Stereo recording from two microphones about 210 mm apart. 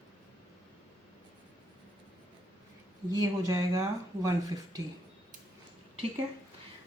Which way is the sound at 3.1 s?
15° right (ahead or behind).